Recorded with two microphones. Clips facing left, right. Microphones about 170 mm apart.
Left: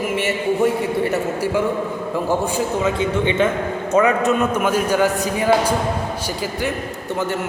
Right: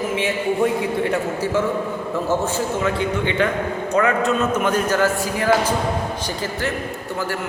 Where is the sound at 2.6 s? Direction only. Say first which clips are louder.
Left 2 dB; 20° left (ahead or behind).